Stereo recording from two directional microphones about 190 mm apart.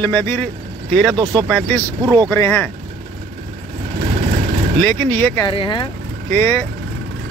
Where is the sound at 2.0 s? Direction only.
20° right (ahead or behind).